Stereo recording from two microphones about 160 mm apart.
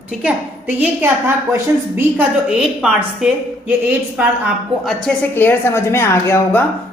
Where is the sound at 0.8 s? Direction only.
15° right (ahead or behind).